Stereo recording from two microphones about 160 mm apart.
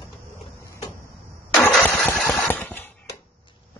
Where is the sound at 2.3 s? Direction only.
10° left (ahead or behind).